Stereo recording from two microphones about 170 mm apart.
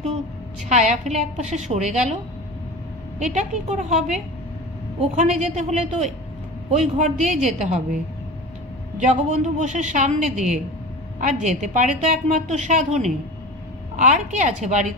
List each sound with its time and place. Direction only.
0.7 s a woman's voice: 45° right (ahead or behind)
3.3 s a woman's voice: 45° right (ahead or behind)
9.0 s a woman's voice: 45° right (ahead or behind)